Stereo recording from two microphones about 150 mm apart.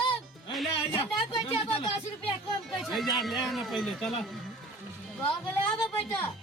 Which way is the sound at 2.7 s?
Centre (ahead or behind).